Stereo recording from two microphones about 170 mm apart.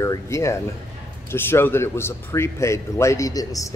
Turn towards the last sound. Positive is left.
turn(degrees=20)  # may be behind; listen again after turning